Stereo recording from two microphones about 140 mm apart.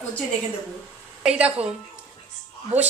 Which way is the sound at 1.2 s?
10° right (ahead or behind).